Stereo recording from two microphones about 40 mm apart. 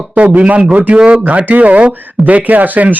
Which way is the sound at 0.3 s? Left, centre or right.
Right.